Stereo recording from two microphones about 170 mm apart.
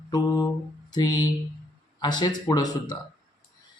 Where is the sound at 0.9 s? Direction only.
20° left (ahead or behind).